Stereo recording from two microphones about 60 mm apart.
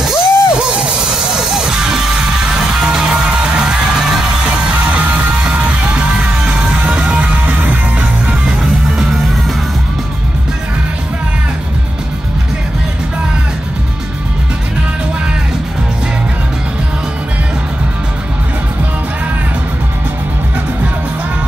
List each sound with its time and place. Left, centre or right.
0.0 s music: centre
4.6 s music: right
8.9 s music: centre